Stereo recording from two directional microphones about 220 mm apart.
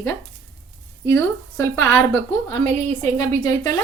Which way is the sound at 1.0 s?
10° left (ahead or behind).